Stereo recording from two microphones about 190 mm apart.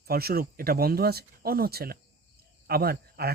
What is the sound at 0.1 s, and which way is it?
Speech, 55° right (ahead or behind).